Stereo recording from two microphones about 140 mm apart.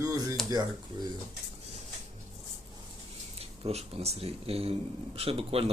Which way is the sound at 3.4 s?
45° right (ahead or behind).